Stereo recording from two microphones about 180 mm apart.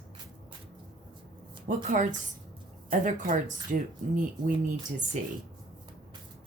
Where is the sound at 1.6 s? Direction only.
45° right (ahead or behind).